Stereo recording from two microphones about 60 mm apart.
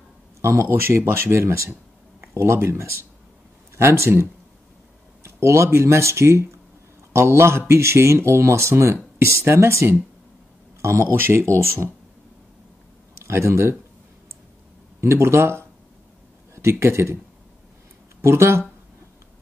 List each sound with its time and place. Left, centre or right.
0.4 s speech: right
13.1 s speech: right
15.0 s speech: right
18.2 s speech: right